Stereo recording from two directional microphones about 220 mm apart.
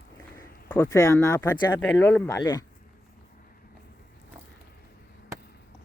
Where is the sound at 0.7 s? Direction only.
15° left (ahead or behind).